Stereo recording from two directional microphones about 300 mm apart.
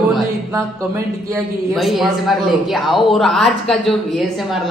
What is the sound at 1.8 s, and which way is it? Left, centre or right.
Speech, centre.